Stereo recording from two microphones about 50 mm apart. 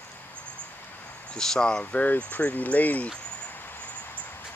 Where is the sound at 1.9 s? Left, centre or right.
Left.